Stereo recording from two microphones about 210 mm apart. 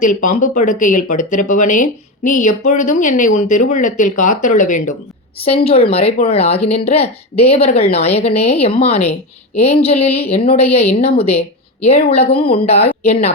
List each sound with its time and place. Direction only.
0.0 s a woman's voice: 35° left (ahead or behind)